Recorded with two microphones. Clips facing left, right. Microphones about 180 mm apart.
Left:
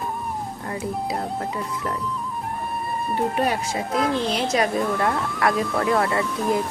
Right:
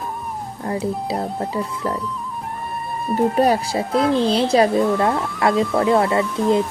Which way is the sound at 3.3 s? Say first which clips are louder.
Right 6 dB; 35° right (ahead or behind).